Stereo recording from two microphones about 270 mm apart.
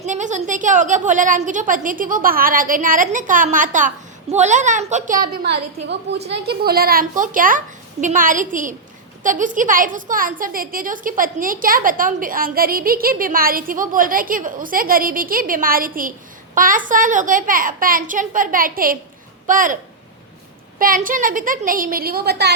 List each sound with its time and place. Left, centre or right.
0.0 s a woman's voice: right